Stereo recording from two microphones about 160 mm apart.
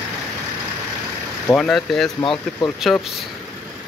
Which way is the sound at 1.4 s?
5° left (ahead or behind).